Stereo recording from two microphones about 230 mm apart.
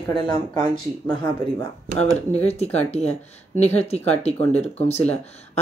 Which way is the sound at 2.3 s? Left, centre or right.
Left.